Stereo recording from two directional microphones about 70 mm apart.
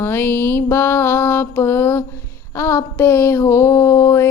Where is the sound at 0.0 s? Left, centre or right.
Left.